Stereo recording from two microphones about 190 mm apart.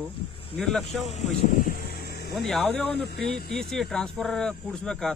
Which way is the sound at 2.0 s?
55° left (ahead or behind).